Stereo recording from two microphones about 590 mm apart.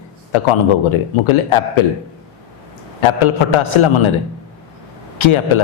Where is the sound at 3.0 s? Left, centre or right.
Left.